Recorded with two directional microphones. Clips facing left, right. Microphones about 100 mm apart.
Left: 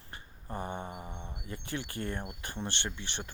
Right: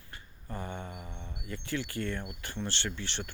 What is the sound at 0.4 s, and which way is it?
Speech, 25° left (ahead or behind).